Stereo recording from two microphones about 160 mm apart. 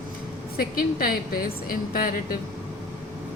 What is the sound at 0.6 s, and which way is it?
A woman's voice, 65° left (ahead or behind).